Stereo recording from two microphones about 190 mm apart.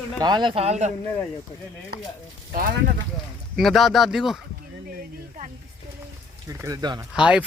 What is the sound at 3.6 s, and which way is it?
Speech, centre (ahead or behind).